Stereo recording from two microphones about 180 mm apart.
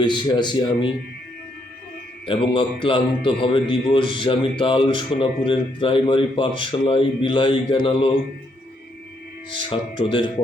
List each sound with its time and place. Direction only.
0.0 s a man's voice: 25° left (ahead or behind)
2.2 s a man's voice: 30° left (ahead or behind)
9.5 s a man's voice: 30° left (ahead or behind)